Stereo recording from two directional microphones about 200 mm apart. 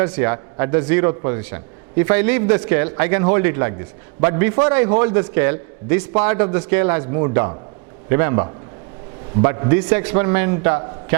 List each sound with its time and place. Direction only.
0.0 s a man's voice: 10° right (ahead or behind)